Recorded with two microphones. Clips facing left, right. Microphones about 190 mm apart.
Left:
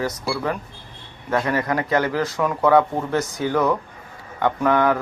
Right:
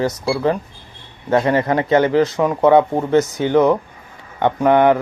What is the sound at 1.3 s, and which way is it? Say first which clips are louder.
Speech: right 6 dB; 25° right (ahead or behind).